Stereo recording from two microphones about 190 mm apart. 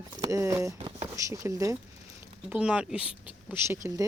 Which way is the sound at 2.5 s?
5° right (ahead or behind).